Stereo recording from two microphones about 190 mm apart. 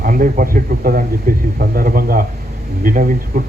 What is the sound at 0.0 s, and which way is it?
A man's voice, 45° right (ahead or behind).